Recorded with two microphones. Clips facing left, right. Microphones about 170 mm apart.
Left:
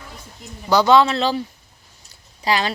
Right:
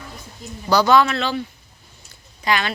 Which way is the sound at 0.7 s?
25° left (ahead or behind).